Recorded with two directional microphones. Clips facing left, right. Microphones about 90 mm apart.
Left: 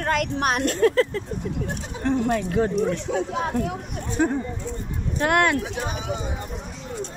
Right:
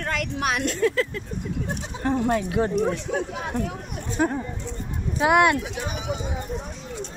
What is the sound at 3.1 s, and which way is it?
Speech, 30° left (ahead or behind).